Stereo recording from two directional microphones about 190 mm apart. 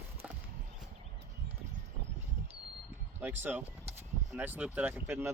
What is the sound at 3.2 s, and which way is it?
Speech, 10° right (ahead or behind).